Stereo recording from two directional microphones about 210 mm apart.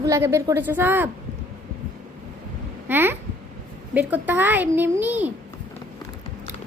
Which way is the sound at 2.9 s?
10° right (ahead or behind).